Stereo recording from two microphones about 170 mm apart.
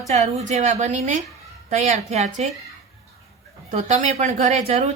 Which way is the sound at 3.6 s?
45° right (ahead or behind).